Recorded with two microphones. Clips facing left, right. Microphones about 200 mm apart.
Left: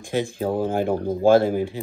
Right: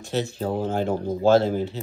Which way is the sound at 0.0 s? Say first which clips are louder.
Left 2 dB; 15° left (ahead or behind).